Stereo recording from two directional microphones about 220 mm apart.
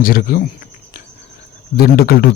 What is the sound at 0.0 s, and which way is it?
Speech, 40° left (ahead or behind).